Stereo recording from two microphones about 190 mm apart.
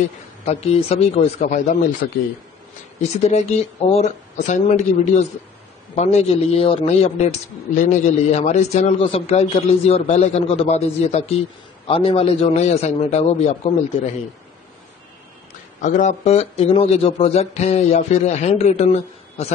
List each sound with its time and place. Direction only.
0.5 s a man's voice: 35° left (ahead or behind)
3.0 s a man's voice: 35° left (ahead or behind)
15.8 s a man's voice: 40° left (ahead or behind)